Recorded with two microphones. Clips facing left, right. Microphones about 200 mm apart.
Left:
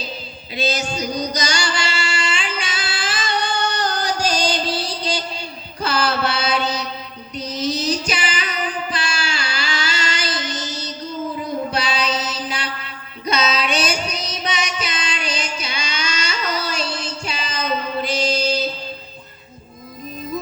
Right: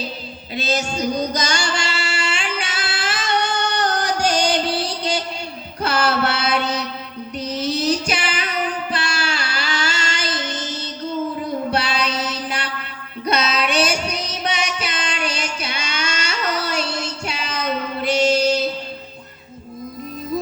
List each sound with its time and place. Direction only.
0.7 s singing: 45° right (ahead or behind); by 5.2 s 65° right (ahead or behind)
5.8 s mantra: 65° right (ahead or behind)
7.5 s music: 10° right (ahead or behind)
8.1 s music: 60° right (ahead or behind)
9.4 s a sound: 45° right (ahead or behind)
11.7 s music: 60° right (ahead or behind)